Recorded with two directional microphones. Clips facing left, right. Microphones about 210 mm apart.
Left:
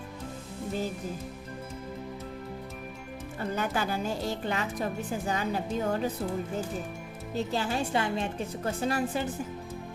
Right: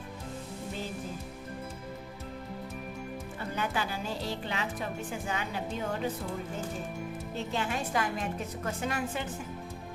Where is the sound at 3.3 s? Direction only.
45° left (ahead or behind).